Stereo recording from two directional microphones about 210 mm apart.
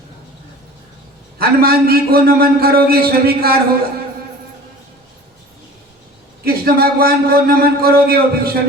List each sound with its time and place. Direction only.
1.4 s a man's voice: 45° right (ahead or behind)
6.4 s a man's voice: 45° right (ahead or behind)